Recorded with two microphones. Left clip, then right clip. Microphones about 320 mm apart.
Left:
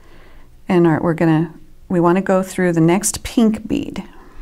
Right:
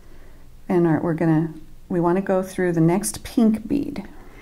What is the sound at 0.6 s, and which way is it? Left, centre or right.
Speech, left.